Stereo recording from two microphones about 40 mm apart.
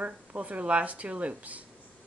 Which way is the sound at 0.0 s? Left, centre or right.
Right.